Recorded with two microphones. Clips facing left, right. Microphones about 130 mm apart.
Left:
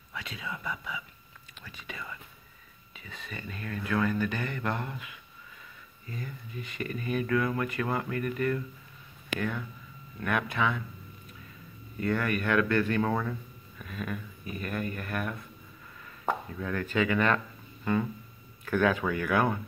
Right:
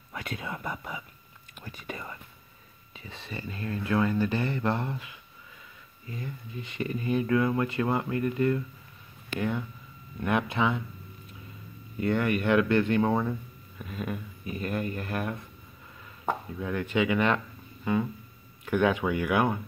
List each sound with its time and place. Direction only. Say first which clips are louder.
0.1 s speech: right 3 dB; 50° right (ahead or behind)
3.0 s speech: right 3 dB; 30° right (ahead or behind)
12.0 s speech: right 3 dB; 25° right (ahead or behind)
16.3 s speech: right 1 dB; 15° right (ahead or behind)